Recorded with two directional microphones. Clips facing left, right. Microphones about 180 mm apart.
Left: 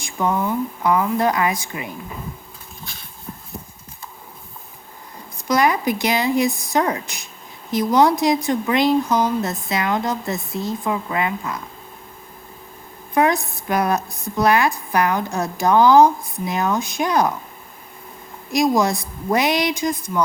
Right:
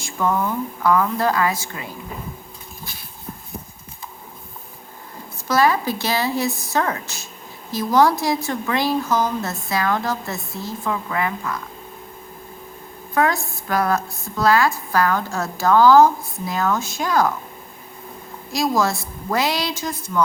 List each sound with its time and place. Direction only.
0.0 s speech: 15° left (ahead or behind)
5.5 s speech: 15° left (ahead or behind)
13.1 s speech: 20° left (ahead or behind)
18.5 s speech: 20° left (ahead or behind)